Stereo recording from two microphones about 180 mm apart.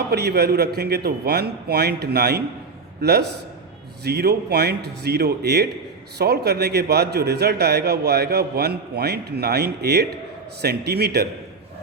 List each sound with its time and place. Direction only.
0.1 s a man's voice: 65° right (ahead or behind)